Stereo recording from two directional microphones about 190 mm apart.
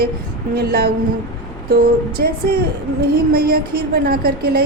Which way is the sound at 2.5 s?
55° right (ahead or behind).